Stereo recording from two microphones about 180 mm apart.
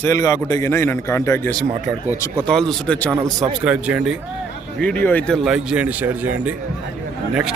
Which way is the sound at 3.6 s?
5° right (ahead or behind).